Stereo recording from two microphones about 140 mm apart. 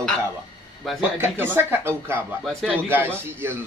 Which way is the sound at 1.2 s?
15° right (ahead or behind).